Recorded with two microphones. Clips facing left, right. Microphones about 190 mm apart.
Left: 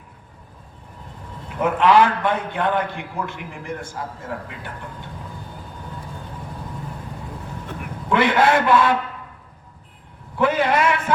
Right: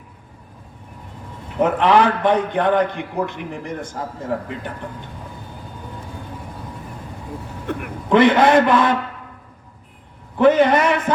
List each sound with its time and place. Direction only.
1.5 s a man's voice: 20° right (ahead or behind)
8.1 s a man's voice: 20° right (ahead or behind)
10.3 s a man's voice: 20° right (ahead or behind)